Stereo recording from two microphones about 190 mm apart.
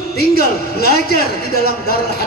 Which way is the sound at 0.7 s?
55° left (ahead or behind).